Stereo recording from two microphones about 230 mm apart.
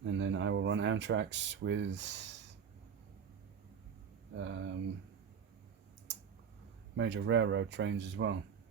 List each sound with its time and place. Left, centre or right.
0.0 s speech: right
4.4 s speech: right
6.9 s speech: right